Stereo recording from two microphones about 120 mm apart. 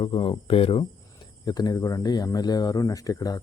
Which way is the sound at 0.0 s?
50° left (ahead or behind).